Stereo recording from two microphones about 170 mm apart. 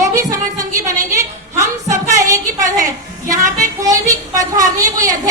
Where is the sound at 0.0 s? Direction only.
20° right (ahead or behind).